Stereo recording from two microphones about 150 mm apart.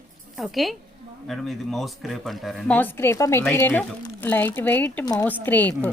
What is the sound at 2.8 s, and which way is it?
A woman's voice, 15° left (ahead or behind).